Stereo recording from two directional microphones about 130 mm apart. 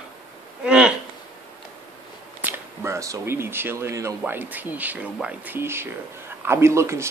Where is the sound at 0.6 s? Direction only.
5° right (ahead or behind).